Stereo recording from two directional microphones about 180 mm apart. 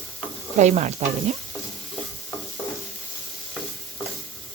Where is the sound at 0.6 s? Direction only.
40° right (ahead or behind).